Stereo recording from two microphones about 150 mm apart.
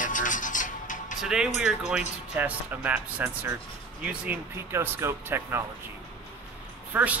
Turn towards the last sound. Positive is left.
turn(degrees=-10)  # may be behind; listen again after turning